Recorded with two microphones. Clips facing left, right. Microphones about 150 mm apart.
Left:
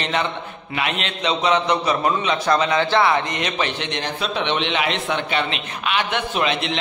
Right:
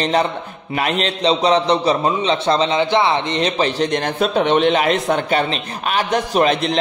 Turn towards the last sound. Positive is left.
turn(degrees=-40)  # may be behind; listen again after turning